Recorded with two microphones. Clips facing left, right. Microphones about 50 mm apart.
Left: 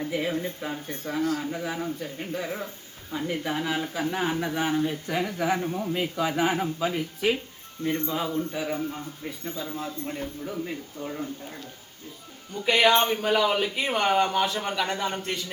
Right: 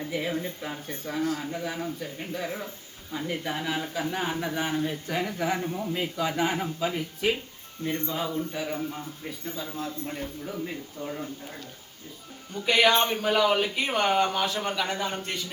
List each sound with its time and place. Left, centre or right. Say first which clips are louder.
0.1 s a man's voice: left 2 dB; centre
8.4 s a man's voice: left 2 dB; centre
12.6 s a man's voice: left 1 dB; centre